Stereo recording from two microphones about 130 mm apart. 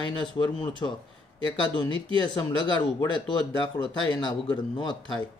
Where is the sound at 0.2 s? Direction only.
40° left (ahead or behind).